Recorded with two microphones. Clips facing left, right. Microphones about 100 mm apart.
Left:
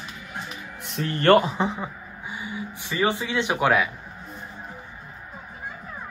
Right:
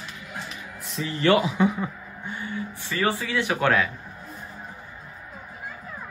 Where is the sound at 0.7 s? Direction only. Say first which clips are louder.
Left 2 dB; 65° left (ahead or behind).